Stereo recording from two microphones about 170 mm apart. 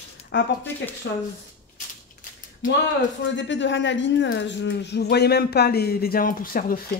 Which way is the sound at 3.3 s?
90° left.